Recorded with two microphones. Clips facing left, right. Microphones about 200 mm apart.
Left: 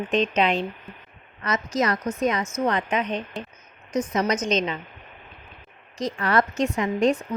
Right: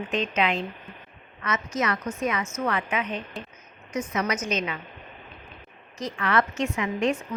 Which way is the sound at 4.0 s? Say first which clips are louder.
Left 4 dB; 35° left (ahead or behind).